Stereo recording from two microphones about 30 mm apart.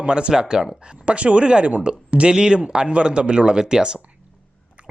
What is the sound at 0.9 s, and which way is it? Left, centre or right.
Speech, right.